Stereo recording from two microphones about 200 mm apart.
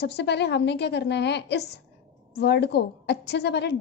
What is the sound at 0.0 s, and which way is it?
A woman's voice, 55° left (ahead or behind).